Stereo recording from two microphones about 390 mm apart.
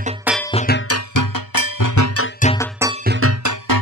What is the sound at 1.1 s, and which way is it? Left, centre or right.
Music, left.